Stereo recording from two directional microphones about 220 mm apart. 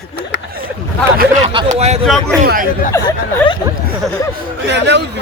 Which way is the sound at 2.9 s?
15° left (ahead or behind).